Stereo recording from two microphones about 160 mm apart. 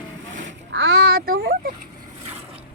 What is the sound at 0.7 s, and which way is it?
Speech, 90° right.